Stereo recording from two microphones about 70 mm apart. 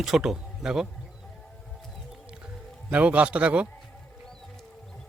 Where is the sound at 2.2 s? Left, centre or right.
Centre.